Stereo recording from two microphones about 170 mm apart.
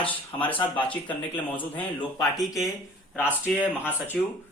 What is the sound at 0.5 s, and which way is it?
Speech, 30° left (ahead or behind).